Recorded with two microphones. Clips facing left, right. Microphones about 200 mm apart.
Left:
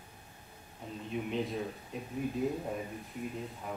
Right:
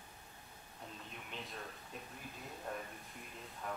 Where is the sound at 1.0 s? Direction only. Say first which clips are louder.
Left 19 dB; centre (ahead or behind).